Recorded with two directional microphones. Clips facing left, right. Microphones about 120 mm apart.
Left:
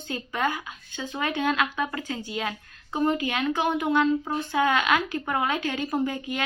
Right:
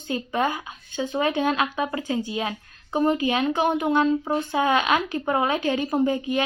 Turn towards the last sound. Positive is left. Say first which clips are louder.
# right 5 dB
turn(degrees=-20)  # may be behind; listen again after turning